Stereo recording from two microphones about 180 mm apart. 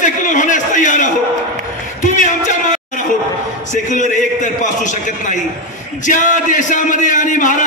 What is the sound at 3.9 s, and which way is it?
Speech, 45° left (ahead or behind).